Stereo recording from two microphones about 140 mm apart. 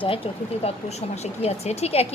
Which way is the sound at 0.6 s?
50° left (ahead or behind).